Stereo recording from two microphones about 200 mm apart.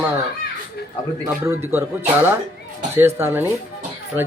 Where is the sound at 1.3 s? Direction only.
10° right (ahead or behind).